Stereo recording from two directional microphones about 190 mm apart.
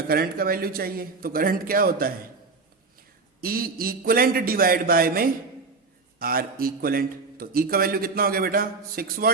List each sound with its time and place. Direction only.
0.1 s a man's voice: 50° right (ahead or behind)
3.4 s a man's voice: 50° right (ahead or behind)